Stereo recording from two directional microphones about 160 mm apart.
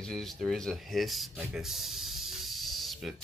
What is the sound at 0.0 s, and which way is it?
Speech, centre (ahead or behind).